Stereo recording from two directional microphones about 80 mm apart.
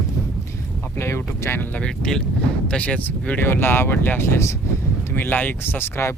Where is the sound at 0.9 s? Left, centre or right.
Left.